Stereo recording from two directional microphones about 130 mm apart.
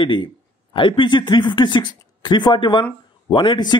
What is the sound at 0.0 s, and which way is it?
Speech, 40° left (ahead or behind).